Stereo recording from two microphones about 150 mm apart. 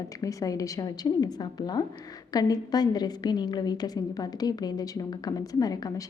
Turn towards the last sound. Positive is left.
turn(degrees=25)  # may be behind; listen again after turning